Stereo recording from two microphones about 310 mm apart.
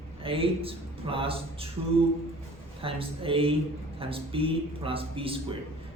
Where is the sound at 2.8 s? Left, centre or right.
Centre.